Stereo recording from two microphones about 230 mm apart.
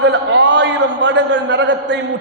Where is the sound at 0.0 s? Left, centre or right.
Right.